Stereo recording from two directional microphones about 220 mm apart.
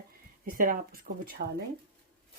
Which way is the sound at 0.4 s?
40° right (ahead or behind).